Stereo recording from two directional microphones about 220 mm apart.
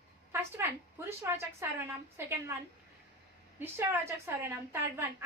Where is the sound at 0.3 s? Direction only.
10° right (ahead or behind).